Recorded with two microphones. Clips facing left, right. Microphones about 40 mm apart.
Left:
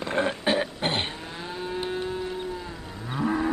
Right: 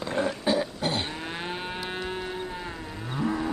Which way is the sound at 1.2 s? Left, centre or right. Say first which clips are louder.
Right 1 dB; right.